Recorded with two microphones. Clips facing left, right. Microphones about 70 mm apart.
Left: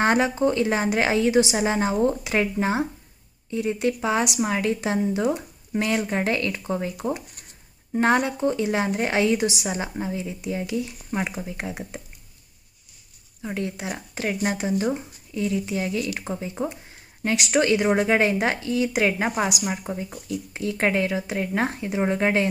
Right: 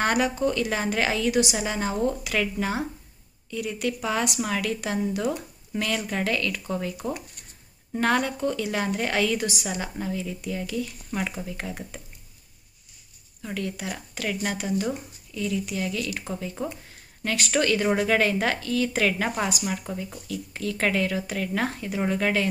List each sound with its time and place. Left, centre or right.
0.0 s speech: left
13.4 s speech: left